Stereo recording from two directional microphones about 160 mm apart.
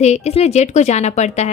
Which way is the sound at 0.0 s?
45° left (ahead or behind).